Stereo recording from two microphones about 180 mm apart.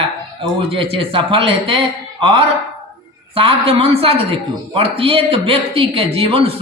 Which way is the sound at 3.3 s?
30° right (ahead or behind).